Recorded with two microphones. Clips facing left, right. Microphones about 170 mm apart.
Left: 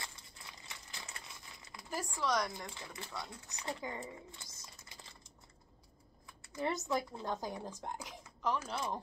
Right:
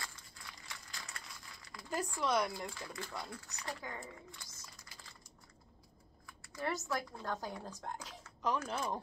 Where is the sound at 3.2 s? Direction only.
20° left (ahead or behind).